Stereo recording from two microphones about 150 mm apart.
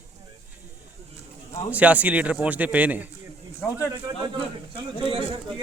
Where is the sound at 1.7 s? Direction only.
10° right (ahead or behind).